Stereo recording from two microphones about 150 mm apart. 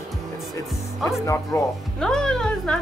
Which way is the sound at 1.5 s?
20° left (ahead or behind).